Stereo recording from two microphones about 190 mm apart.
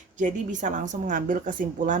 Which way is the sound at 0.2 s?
40° right (ahead or behind).